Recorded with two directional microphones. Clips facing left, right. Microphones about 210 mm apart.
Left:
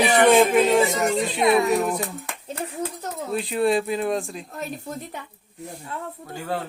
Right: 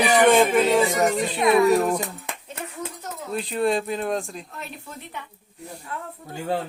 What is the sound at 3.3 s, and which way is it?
Speech, 5° left (ahead or behind).